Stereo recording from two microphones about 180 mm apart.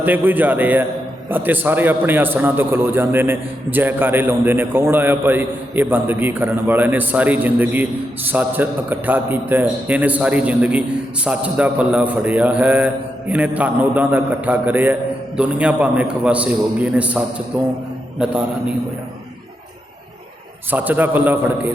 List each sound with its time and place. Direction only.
0.0 s a man's voice: 10° right (ahead or behind)
20.7 s a man's voice: 10° right (ahead or behind)